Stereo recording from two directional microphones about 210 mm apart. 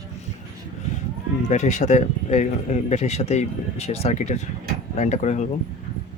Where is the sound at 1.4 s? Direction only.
35° left (ahead or behind).